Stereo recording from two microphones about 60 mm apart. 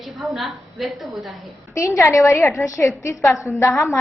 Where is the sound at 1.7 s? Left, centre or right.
Left.